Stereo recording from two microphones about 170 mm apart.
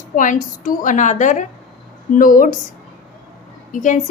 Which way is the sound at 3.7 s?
50° left (ahead or behind).